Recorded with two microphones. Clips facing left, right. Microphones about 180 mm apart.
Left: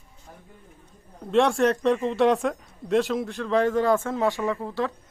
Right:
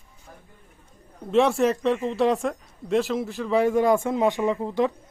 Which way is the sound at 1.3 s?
5° right (ahead or behind).